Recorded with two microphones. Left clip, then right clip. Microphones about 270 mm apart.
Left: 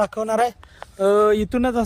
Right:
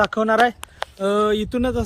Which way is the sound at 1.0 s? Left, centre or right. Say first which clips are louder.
Left 3 dB; left.